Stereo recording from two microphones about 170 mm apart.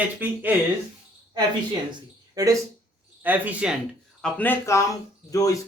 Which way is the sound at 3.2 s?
10° right (ahead or behind).